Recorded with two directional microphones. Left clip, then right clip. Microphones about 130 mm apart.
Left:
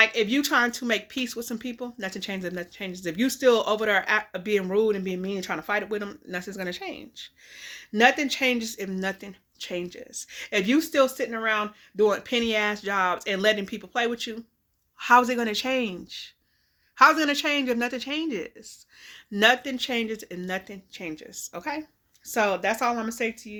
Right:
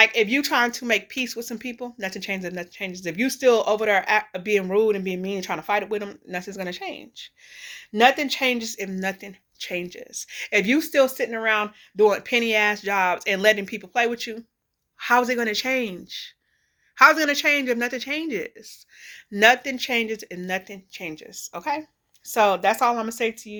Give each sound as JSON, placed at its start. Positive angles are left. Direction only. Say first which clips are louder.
{"t": 0.0, "sound": "speech", "louder": "right 3 dB", "side_deg": 25}
{"t": 8.8, "sound": "speech", "louder": "right 2 dB", "side_deg": 40}
{"t": 9.6, "sound": "speech", "louder": "right 3 dB", "side_deg": 25}
{"t": 22.3, "sound": "speech", "louder": "right 5 dB", "side_deg": 20}